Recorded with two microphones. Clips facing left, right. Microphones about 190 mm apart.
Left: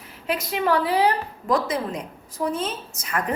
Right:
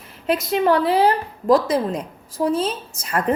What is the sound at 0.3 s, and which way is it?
A woman's voice, 25° right (ahead or behind).